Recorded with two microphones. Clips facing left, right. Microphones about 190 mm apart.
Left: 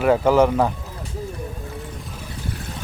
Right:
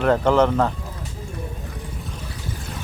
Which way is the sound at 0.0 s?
10° left (ahead or behind).